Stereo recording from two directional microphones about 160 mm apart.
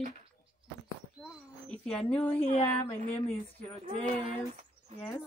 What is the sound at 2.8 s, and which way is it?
Speech, 40° left (ahead or behind).